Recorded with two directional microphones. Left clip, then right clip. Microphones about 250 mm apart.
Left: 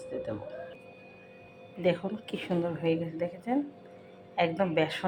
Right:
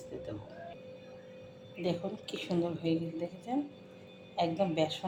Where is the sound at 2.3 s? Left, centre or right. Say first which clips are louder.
Left 3 dB; left.